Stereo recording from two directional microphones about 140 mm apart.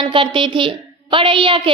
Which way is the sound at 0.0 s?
35° right (ahead or behind).